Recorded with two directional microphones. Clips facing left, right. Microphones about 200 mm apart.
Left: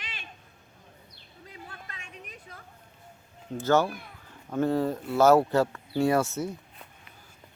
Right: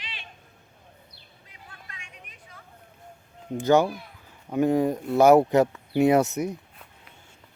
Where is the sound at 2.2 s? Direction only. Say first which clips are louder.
Left 4 dB; 35° left (ahead or behind).